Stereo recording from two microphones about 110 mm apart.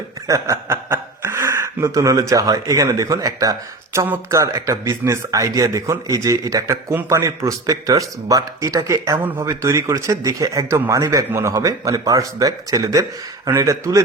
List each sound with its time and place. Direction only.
0.3 s speech: 30° right (ahead or behind)
3.9 s speech: 20° right (ahead or behind)